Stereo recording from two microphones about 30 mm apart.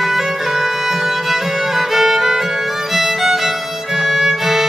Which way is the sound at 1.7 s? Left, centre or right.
Centre.